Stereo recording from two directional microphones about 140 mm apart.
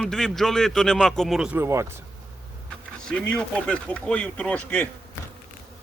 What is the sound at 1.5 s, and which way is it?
Speech, 20° right (ahead or behind).